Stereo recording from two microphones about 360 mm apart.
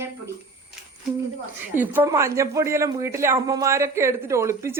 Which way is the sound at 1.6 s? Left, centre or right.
Centre.